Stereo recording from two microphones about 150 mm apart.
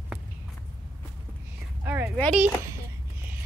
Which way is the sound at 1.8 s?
15° right (ahead or behind).